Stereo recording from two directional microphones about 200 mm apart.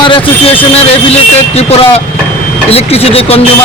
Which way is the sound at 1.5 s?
30° left (ahead or behind).